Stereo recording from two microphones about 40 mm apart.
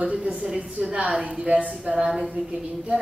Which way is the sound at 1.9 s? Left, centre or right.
Centre.